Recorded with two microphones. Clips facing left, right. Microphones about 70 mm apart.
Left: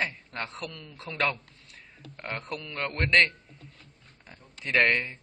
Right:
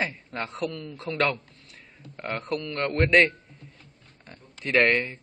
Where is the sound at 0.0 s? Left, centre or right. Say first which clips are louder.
Right 2 dB; centre.